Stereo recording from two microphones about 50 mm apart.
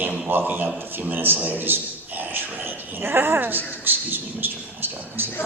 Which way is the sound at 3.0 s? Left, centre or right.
Right.